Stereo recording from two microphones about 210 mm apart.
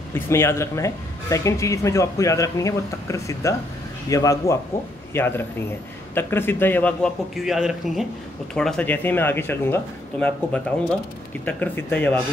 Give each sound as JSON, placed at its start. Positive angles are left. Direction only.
{"t": 0.1, "sound": "a man's voice", "side_deg": 10}